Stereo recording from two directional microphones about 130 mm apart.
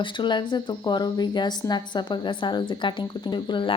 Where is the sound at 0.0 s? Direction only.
35° left (ahead or behind).